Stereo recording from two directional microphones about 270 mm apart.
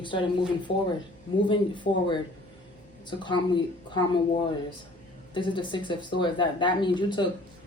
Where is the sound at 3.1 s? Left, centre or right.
Centre.